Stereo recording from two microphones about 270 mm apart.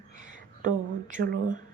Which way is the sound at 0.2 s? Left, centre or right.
Right.